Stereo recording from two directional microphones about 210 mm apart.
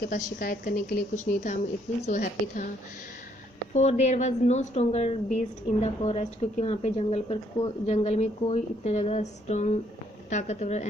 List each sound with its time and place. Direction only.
0.3 s a woman's voice: 45° left (ahead or behind)
3.8 s a woman's voice: 30° left (ahead or behind)